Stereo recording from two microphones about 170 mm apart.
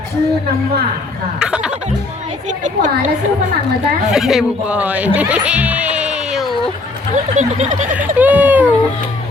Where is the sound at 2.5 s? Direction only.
45° right (ahead or behind).